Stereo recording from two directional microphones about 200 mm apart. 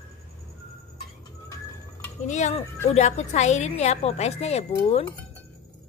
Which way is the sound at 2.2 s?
35° left (ahead or behind).